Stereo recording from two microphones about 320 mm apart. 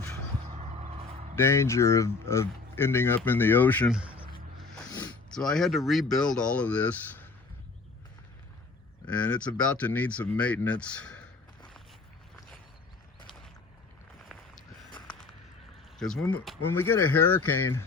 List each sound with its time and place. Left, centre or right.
0.6 s vehicle: centre
1.4 s speech: centre
9.0 s speech: centre
16.0 s speech: centre